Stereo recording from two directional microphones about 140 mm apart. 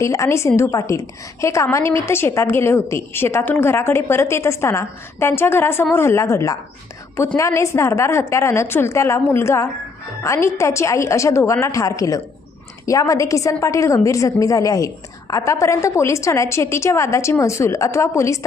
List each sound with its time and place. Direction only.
0.0 s a woman's voice: 20° left (ahead or behind)